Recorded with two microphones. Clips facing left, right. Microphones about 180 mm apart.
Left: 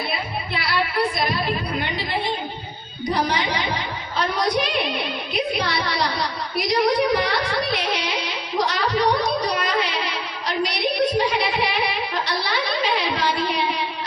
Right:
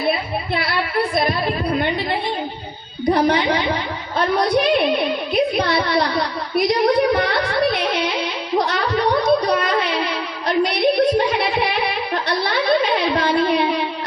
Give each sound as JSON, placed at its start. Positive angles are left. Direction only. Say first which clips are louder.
{"t": 3.1, "sound": "a woman's voice", "louder": "right 7 dB", "side_deg": -55}
{"t": 4.2, "sound": "music", "louder": "right 5 dB", "side_deg": -55}
{"t": 8.5, "sound": "a sound", "louder": "right 2 dB", "side_deg": -55}